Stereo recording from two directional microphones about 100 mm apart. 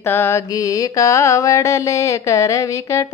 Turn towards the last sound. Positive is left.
turn(degrees=30)  # may be behind; listen again after turning